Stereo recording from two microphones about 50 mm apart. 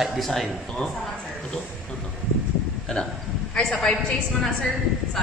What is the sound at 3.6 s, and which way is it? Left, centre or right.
Speech, centre.